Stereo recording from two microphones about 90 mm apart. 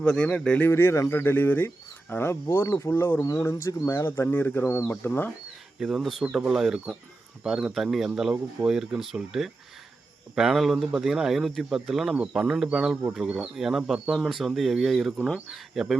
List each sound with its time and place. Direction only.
0.0 s speech: 10° left (ahead or behind)
0.7 s speech: 30° left (ahead or behind)
2.9 s speech: 25° left (ahead or behind)
5.8 s speech: centre (ahead or behind)